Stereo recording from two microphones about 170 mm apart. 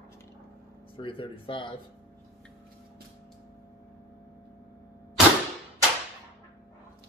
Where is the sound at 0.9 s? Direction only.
30° left (ahead or behind).